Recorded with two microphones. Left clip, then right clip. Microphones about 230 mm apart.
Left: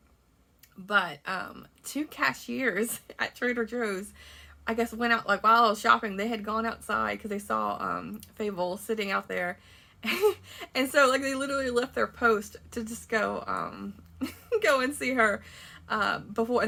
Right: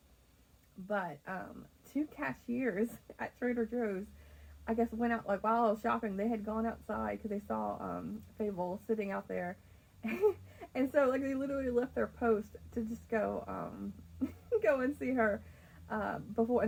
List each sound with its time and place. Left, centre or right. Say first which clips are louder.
0.9 s speech: left 11 dB; centre